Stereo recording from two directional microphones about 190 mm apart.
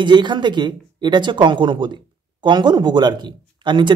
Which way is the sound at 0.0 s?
25° right (ahead or behind).